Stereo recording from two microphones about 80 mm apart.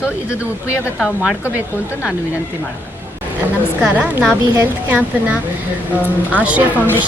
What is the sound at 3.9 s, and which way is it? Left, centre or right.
Speech, centre.